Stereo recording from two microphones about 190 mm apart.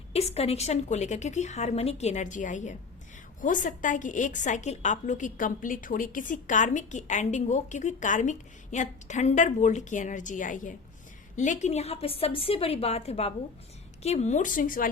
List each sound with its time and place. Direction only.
0.1 s a woman's voice: 35° left (ahead or behind)